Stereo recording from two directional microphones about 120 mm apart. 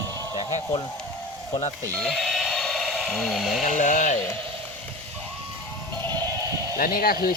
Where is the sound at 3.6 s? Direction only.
90° left.